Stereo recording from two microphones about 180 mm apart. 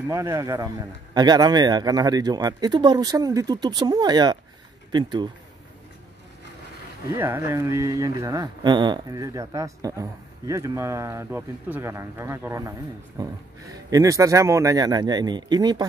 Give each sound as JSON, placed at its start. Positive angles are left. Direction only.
{"t": 0.1, "sound": "a man's voice", "side_deg": -15}
{"t": 7.1, "sound": "a man's voice", "side_deg": -15}